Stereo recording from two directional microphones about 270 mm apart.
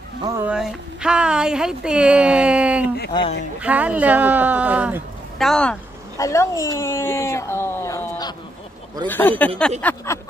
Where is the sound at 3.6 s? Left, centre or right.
Centre.